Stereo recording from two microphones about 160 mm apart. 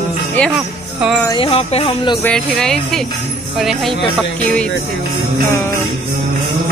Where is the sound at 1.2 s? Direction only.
30° left (ahead or behind).